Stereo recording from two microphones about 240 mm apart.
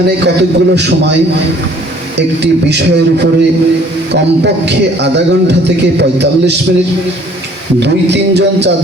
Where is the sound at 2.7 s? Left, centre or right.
Right.